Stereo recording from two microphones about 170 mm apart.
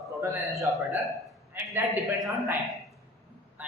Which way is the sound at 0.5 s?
Centre (ahead or behind).